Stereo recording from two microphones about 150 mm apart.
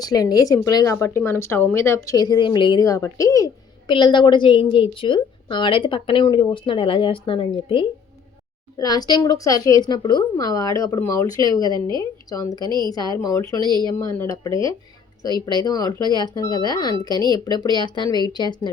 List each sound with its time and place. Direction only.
0.0 s a woman's voice: 25° left (ahead or behind)
3.8 s a woman's voice: 35° left (ahead or behind)
13.6 s speech: 30° right (ahead or behind)
14.0 s a woman's voice: 20° left (ahead or behind)